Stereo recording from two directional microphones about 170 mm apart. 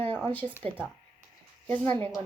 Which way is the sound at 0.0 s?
10° left (ahead or behind).